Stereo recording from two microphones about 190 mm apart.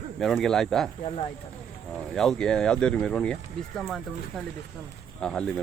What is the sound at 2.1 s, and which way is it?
Speech, centre (ahead or behind).